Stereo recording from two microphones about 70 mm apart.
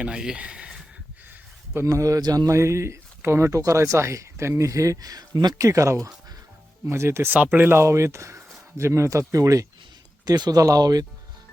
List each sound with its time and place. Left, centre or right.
0.0 s speech: centre
1.9 s speech: right
2.5 s speech: right
5.5 s speech: right
7.3 s speech: right
10.2 s speech: right
10.6 s speech: right